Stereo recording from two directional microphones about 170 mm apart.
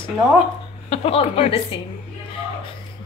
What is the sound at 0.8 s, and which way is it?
Speech, 35° left (ahead or behind).